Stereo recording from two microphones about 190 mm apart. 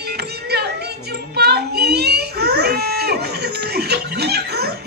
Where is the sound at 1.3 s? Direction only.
55° right (ahead or behind).